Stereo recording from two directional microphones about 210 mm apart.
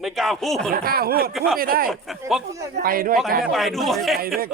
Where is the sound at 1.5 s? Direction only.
45° right (ahead or behind).